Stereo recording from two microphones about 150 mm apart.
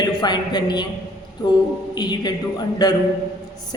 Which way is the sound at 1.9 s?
30° left (ahead or behind).